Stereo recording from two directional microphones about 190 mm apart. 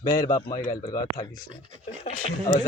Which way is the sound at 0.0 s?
20° left (ahead or behind).